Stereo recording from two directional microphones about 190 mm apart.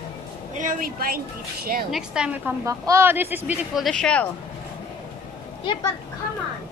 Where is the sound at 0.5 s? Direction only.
45° right (ahead or behind).